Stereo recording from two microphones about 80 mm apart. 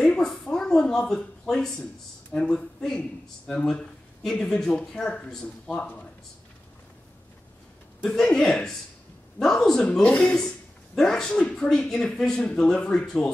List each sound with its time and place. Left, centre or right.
0.0 s speech: centre
8.0 s a man's voice: centre
10.0 s speech: centre